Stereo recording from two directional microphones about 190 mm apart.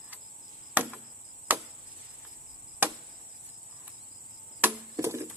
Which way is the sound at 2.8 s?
10° right (ahead or behind).